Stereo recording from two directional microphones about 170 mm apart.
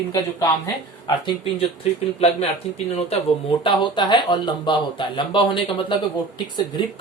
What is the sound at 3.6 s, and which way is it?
Speech, 30° left (ahead or behind).